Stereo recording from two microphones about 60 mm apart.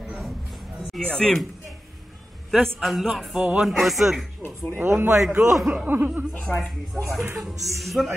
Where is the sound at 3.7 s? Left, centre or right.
Centre.